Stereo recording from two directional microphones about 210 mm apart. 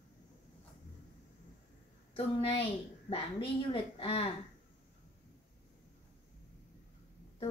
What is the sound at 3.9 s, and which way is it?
Speech, 30° left (ahead or behind).